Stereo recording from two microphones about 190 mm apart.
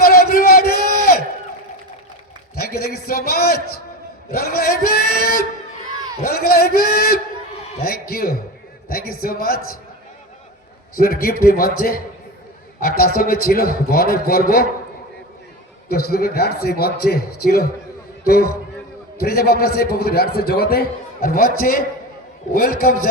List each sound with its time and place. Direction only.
0.0 s a sound: 55° left (ahead or behind)
2.6 s a man's voice: 55° left (ahead or behind)
6.2 s a sound: 55° left (ahead or behind)
8.9 s a man's voice: 50° left (ahead or behind)
10.9 s a man's voice: 50° left (ahead or behind)
15.9 s a man's voice: 55° left (ahead or behind)